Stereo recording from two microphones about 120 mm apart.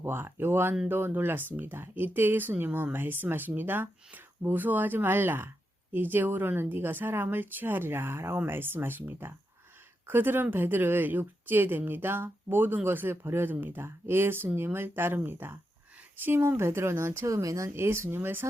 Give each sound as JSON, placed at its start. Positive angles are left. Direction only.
{"t": 0.0, "sound": "speech", "side_deg": -20}